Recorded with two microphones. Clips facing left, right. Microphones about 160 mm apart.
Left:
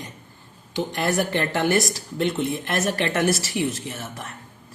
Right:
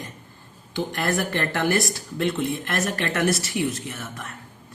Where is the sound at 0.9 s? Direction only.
20° left (ahead or behind).